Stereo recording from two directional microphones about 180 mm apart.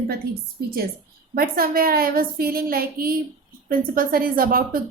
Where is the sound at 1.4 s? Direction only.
55° right (ahead or behind).